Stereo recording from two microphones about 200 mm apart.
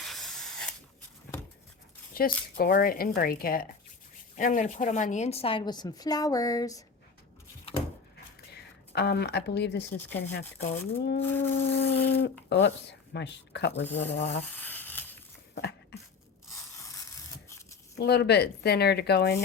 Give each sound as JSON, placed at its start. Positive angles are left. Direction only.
{"t": 0.0, "sound": "spray", "side_deg": 0}
{"t": 2.1, "sound": "a woman's voice", "side_deg": 45}
{"t": 8.5, "sound": "speech", "side_deg": 55}
{"t": 10.1, "sound": "a sound", "side_deg": 10}
{"t": 12.2, "sound": "speech", "side_deg": 60}
{"t": 13.8, "sound": "a sound", "side_deg": 10}
{"t": 14.2, "sound": "speech", "side_deg": 65}
{"t": 14.4, "sound": "crumpling", "side_deg": 10}
{"t": 16.6, "sound": "a sound", "side_deg": 15}
{"t": 18.0, "sound": "speech", "side_deg": 55}